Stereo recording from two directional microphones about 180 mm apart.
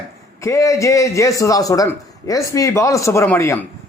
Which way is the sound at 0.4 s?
15° left (ahead or behind).